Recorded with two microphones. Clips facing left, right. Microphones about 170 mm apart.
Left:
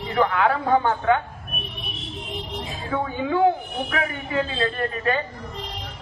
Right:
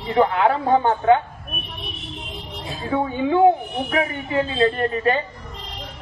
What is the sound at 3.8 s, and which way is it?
A man's voice, 25° right (ahead or behind).